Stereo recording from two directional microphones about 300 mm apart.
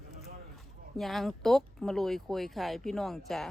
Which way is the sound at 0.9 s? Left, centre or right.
Centre.